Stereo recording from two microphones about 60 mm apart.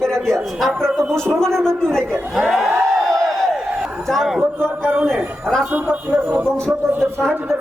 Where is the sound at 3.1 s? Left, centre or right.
Centre.